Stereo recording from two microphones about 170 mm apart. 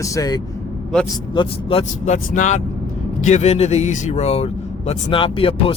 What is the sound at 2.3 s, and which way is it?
Speech, 45° left (ahead or behind).